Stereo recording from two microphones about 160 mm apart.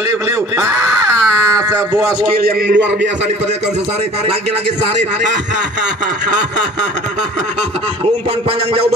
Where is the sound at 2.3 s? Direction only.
80° right.